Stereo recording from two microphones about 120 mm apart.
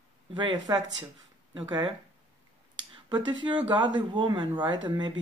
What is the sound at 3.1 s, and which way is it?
Speech, 40° right (ahead or behind).